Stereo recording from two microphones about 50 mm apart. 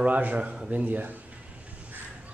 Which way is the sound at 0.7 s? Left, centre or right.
Right.